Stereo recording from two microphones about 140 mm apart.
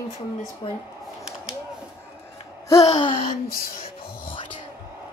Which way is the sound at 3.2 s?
90° left.